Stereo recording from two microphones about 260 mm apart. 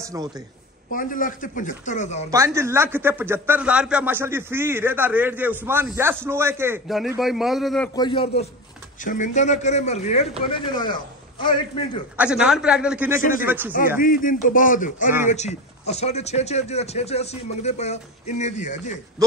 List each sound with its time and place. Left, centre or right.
0.0 s a woman's voice: centre
0.9 s speech: left
2.3 s speech: centre
7.9 s speech: centre
12.2 s a man's voice: centre
13.2 s a man's voice: left
13.5 s speech: centre
14.0 s a man's voice: left